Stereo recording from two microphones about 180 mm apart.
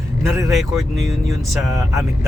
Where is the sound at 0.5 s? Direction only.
Centre (ahead or behind).